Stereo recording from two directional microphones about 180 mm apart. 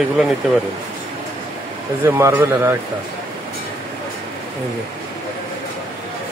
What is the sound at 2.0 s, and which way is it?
Speech, 15° right (ahead or behind).